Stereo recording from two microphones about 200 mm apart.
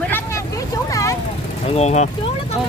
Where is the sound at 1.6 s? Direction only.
30° left (ahead or behind).